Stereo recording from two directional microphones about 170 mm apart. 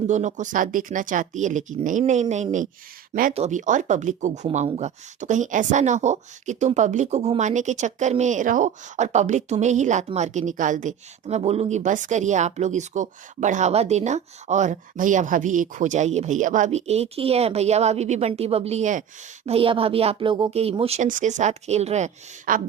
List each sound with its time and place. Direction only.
0.1 s speech: 45° right (ahead or behind)
19.5 s speech: 35° right (ahead or behind)